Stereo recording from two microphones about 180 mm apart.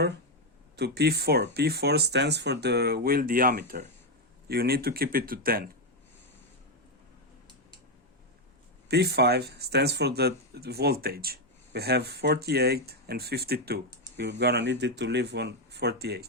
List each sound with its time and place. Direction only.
0.8 s speech: 65° right (ahead or behind)
8.9 s speech: 65° right (ahead or behind)